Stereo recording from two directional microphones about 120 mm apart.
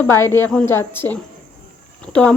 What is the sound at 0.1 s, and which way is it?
Speech, 20° left (ahead or behind).